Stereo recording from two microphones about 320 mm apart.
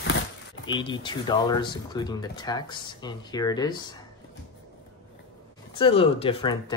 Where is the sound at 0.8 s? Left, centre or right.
Centre.